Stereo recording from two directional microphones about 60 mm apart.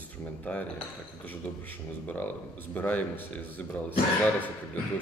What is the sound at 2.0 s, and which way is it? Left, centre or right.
Speech, left.